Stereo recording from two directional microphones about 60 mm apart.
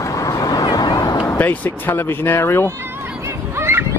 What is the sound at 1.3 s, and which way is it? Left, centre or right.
Speech, left.